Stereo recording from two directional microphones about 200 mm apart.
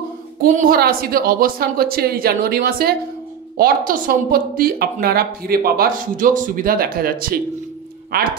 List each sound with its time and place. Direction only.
0.4 s a woman's voice: 45° right (ahead or behind)